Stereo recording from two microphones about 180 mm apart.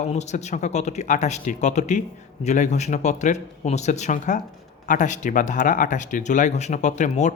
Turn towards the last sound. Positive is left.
turn(degrees=40)  # may be behind; listen again after turning